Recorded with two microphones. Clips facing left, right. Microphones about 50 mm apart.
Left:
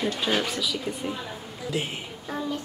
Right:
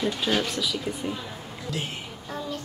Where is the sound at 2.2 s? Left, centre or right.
Centre.